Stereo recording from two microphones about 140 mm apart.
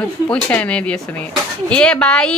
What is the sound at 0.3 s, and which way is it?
A woman's voice, 10° left (ahead or behind).